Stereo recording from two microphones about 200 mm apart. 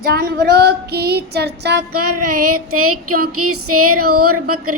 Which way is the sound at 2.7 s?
90° right.